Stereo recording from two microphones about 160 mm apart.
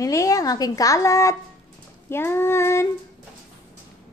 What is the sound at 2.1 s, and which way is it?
Female singing, 15° left (ahead or behind).